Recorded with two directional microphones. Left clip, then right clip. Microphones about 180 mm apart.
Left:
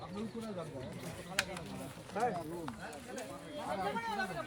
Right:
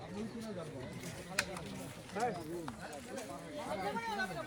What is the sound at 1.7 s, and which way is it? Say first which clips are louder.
Speech: left 2 dB; 25° left (ahead or behind).